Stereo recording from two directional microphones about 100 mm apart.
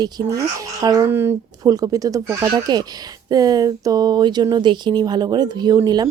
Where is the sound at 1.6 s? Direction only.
40° right (ahead or behind).